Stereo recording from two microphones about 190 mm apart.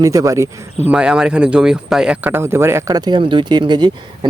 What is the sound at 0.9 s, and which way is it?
Speech, 5° right (ahead or behind).